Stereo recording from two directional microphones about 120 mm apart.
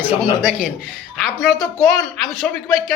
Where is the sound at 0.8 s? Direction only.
Centre (ahead or behind).